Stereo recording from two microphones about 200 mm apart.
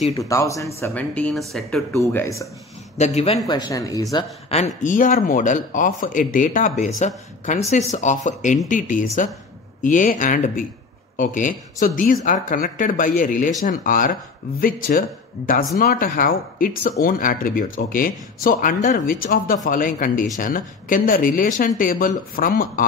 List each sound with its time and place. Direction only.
0.1 s speech: 15° left (ahead or behind)
3.0 s speech: 35° left (ahead or behind)
3.4 s speech: 20° left (ahead or behind)
4.6 s speech: 40° left (ahead or behind)